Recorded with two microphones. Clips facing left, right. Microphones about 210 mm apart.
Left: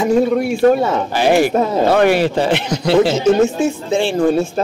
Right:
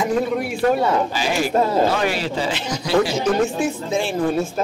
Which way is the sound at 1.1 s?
60° left (ahead or behind).